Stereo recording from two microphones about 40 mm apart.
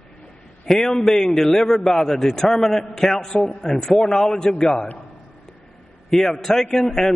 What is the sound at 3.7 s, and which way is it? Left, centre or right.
A man's voice, centre.